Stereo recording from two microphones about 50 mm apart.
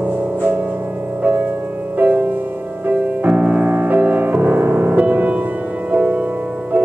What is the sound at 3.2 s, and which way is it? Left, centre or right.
Music, right.